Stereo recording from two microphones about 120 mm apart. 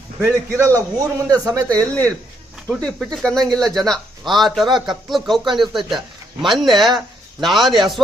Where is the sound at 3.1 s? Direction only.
5° left (ahead or behind).